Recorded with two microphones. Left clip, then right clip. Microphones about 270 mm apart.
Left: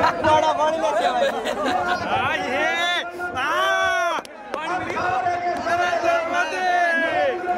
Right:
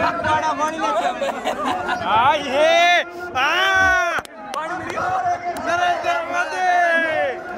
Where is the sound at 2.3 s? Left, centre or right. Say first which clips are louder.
Right 6 dB; centre.